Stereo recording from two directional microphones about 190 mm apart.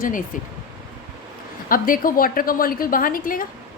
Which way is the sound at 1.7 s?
45° left (ahead or behind).